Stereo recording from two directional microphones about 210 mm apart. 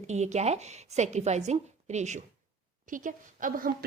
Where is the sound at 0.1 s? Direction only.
30° right (ahead or behind).